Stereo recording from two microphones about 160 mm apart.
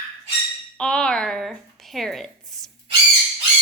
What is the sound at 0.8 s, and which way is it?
Speech, 5° left (ahead or behind).